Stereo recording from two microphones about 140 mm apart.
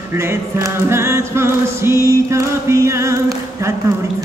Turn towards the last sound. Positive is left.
turn(degrees=-20)  # may be behind; listen again after turning